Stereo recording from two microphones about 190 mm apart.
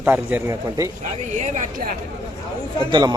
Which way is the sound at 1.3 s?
40° right (ahead or behind).